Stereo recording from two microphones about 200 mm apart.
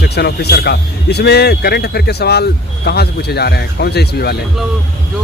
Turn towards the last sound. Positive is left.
turn(degrees=55)  # may be behind; listen again after turning